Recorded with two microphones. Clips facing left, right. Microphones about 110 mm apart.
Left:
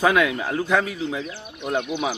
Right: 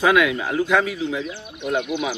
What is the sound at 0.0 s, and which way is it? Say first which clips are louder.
Speech: right 2 dB; 30° left (ahead or behind).